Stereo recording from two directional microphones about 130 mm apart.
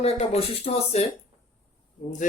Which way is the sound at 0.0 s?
50° left (ahead or behind).